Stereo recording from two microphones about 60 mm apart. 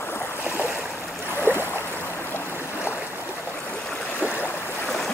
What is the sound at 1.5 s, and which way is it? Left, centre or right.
Boat, right.